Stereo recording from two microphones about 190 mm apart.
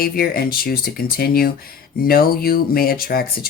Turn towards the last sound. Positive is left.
turn(degrees=50)  # may be behind; listen again after turning